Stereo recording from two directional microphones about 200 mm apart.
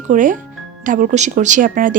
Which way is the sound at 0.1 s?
40° right (ahead or behind).